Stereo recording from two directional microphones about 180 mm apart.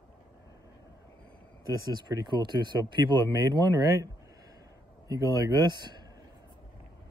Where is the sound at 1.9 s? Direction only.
25° right (ahead or behind).